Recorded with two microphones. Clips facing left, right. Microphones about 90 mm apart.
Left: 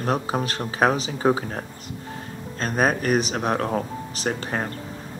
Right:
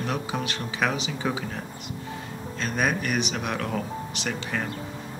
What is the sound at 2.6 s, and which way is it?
Speech, 40° left (ahead or behind).